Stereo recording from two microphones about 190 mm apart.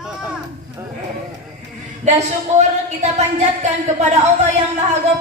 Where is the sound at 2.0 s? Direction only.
35° right (ahead or behind).